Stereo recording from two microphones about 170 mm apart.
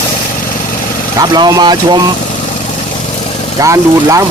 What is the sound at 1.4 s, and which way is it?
Speech, 25° right (ahead or behind).